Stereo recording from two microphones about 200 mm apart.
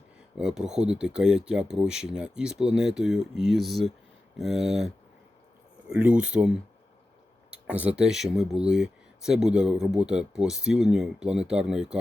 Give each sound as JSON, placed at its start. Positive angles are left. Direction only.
{"t": 0.3, "sound": "speech", "side_deg": -5}
{"t": 5.9, "sound": "speech", "side_deg": -5}